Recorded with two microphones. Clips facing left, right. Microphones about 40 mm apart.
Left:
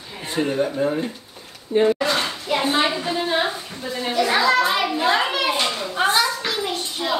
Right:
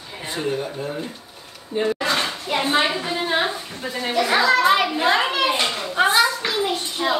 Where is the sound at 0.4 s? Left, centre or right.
Centre.